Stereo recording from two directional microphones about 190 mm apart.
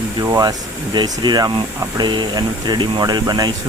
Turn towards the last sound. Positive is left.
turn(degrees=-20)  # may be behind; listen again after turning